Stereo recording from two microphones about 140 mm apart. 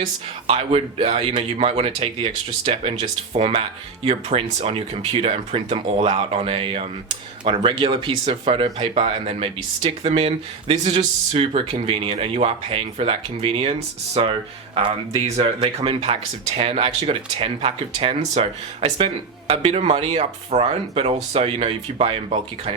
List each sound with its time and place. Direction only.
0.4 s speech: 45° right (ahead or behind)